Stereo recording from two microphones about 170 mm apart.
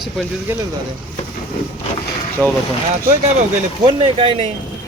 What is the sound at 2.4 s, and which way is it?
Speech, 10° left (ahead or behind).